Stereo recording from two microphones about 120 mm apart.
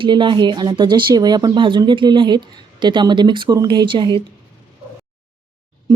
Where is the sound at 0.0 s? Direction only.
40° right (ahead or behind).